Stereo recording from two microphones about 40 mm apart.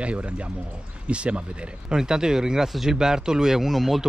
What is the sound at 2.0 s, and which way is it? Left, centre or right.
Speech, centre.